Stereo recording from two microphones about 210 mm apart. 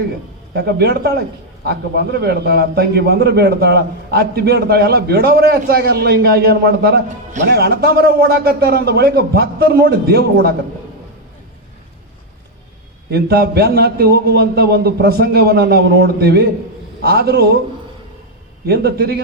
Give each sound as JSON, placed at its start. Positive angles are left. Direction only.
{"t": 0.5, "sound": "a man's voice", "side_deg": -50}
{"t": 2.1, "sound": "a man's voice", "side_deg": -50}
{"t": 13.1, "sound": "a man's voice", "side_deg": -50}
{"t": 18.6, "sound": "a man's voice", "side_deg": -50}